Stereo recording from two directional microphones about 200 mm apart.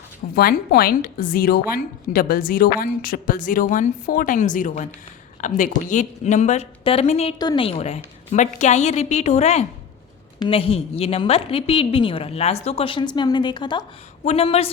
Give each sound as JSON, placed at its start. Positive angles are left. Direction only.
{"t": 0.3, "sound": "a woman's voice", "side_deg": 50}